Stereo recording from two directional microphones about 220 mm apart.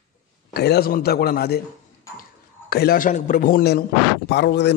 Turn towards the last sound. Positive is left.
turn(degrees=50)  # may be behind; listen again after turning